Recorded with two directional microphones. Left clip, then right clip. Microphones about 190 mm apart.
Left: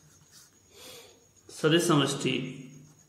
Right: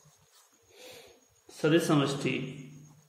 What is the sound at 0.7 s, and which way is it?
Owl, 20° left (ahead or behind).